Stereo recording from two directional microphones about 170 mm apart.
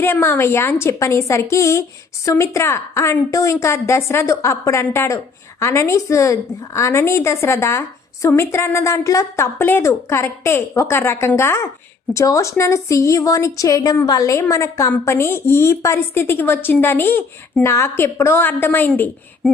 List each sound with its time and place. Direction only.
0.0 s a woman's voice: 15° left (ahead or behind)